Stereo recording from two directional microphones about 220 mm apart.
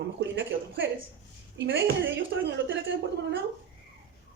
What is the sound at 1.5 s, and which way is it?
Speech, 55° right (ahead or behind).